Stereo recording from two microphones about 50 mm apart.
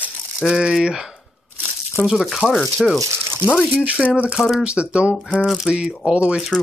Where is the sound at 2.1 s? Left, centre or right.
Centre.